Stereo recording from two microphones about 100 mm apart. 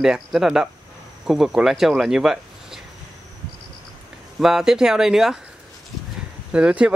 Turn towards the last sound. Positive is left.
turn(degrees=-10)  # may be behind; listen again after turning